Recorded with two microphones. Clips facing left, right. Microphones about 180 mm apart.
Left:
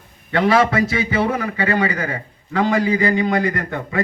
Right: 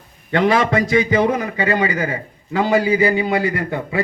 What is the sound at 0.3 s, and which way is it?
A man's voice, 20° right (ahead or behind).